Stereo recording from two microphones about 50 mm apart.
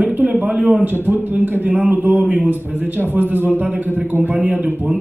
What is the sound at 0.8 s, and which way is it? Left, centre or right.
A man's voice, right.